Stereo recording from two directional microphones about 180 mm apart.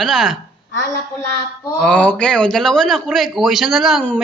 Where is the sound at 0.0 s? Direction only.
Centre (ahead or behind).